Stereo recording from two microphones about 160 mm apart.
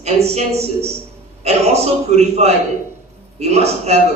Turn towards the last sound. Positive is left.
turn(degrees=-40)  # may be behind; listen again after turning